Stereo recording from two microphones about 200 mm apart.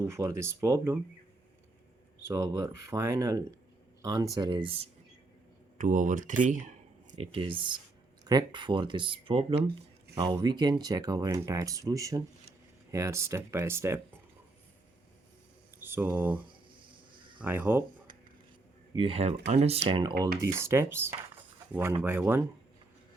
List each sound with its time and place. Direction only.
0.0 s speech: 15° right (ahead or behind)
2.2 s speech: 15° right (ahead or behind)
5.7 s speech: 40° right (ahead or behind); by 14.0 s 15° right (ahead or behind)
15.8 s speech: 10° right (ahead or behind)
17.4 s speech: 10° right (ahead or behind)
18.9 s speech: 30° right (ahead or behind)
20.4 s speech: 15° right (ahead or behind)